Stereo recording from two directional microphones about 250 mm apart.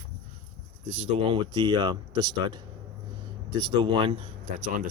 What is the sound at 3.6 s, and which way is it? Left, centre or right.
Speech, centre.